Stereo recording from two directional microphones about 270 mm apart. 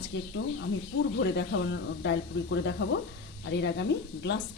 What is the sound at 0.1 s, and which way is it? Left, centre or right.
Speech, left.